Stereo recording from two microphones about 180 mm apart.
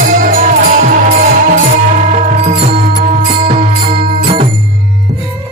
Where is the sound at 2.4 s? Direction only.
40° right (ahead or behind).